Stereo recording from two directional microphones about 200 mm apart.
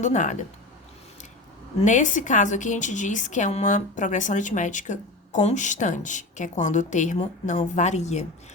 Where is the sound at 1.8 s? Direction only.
40° left (ahead or behind).